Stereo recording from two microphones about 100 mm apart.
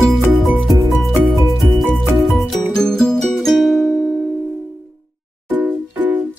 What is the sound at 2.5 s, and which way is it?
Music, 5° left (ahead or behind).